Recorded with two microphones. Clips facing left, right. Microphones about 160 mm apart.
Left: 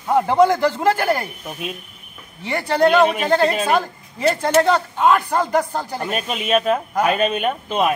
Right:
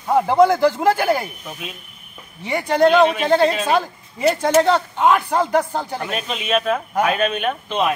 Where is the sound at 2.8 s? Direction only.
5° left (ahead or behind).